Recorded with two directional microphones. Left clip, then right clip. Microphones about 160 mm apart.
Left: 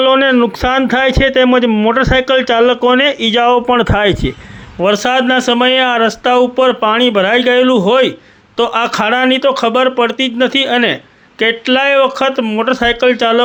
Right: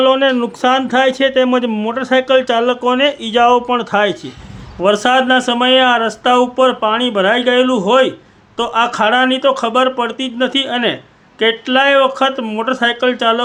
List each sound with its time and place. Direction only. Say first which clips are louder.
0.0 s speech: left 2 dB; 25° left (ahead or behind)
3.8 s speech: left 3 dB; 35° left (ahead or behind)
4.8 s speech: even; 20° left (ahead or behind)